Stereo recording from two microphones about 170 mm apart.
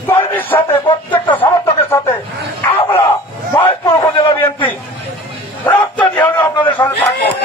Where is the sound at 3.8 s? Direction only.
25° left (ahead or behind).